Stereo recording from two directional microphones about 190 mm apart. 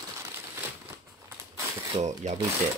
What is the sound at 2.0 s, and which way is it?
Speech, 40° right (ahead or behind).